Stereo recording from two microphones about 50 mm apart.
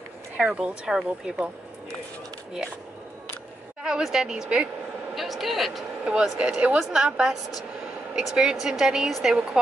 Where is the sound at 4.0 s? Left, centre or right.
Centre.